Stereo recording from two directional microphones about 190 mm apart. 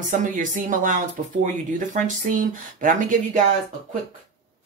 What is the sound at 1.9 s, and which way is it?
Speech, 45° right (ahead or behind).